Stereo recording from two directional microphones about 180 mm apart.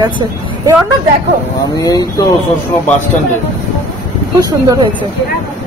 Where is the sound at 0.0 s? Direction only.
25° right (ahead or behind).